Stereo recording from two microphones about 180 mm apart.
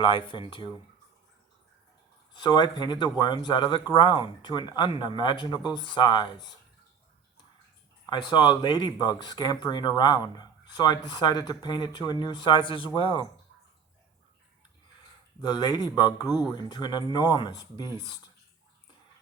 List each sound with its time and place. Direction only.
0.0 s speech: 30° left (ahead or behind)
2.3 s speech: 25° left (ahead or behind)
8.0 s speech: 25° left (ahead or behind)
15.4 s speech: 25° left (ahead or behind)